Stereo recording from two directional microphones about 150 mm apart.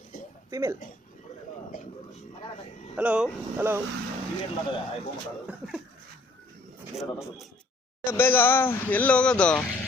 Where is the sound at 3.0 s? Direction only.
10° right (ahead or behind).